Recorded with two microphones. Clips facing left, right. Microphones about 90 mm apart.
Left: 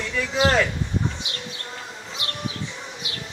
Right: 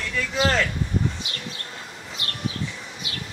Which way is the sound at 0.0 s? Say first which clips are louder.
Left 2 dB; 15° left (ahead or behind).